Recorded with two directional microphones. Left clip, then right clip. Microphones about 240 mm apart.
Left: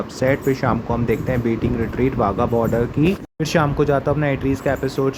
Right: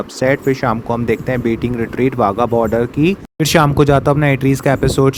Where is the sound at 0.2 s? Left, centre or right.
Right.